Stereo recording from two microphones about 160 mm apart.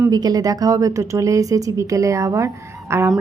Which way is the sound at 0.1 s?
25° right (ahead or behind).